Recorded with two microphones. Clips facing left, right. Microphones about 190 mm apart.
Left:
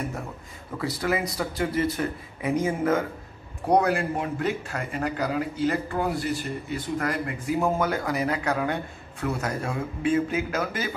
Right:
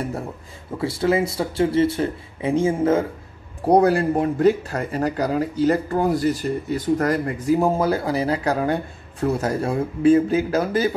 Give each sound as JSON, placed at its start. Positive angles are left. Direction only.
{"t": 0.7, "sound": "speech", "side_deg": -25}